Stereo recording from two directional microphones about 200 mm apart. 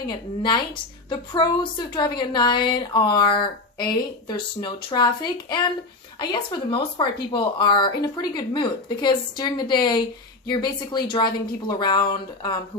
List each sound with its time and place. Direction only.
0.0 s speech: 20° left (ahead or behind)